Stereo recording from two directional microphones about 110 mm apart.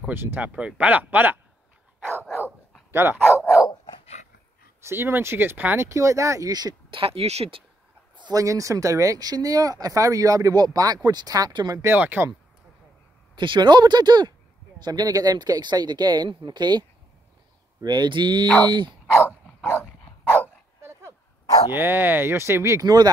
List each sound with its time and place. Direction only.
0.1 s speech: 20° right (ahead or behind)
2.9 s speech: 20° right (ahead or behind)
4.0 s dog: 90° left
4.8 s speech: 20° right (ahead or behind)
6.9 s speech: 55° right (ahead or behind)
8.2 s speech: 35° right (ahead or behind)
11.9 s speech: 15° right (ahead or behind)
13.4 s speech: 45° right (ahead or behind)
19.2 s dog: 15° left (ahead or behind)
20.3 s dog: 25° right (ahead or behind)
21.7 s speech: 20° right (ahead or behind)